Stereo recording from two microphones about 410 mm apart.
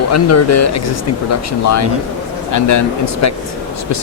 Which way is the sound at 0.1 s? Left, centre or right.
Left.